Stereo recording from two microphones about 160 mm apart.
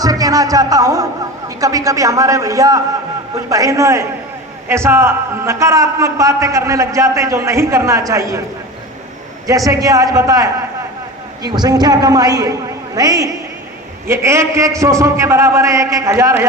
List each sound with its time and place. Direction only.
0.0 s a man's voice: 20° right (ahead or behind)
9.5 s a man's voice: 20° right (ahead or behind)